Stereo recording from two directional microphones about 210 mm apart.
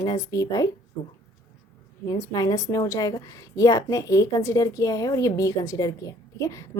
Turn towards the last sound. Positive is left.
turn(degrees=15)  # may be behind; listen again after turning